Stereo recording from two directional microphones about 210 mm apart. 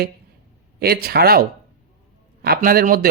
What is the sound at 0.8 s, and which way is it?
Speech, 45° right (ahead or behind).